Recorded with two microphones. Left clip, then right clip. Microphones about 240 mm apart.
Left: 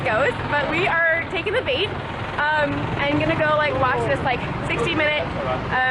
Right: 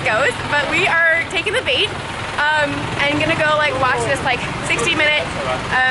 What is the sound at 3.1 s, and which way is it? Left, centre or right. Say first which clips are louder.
Speech: right 3 dB; centre.